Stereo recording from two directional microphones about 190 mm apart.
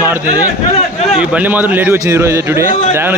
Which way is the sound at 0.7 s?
35° left (ahead or behind).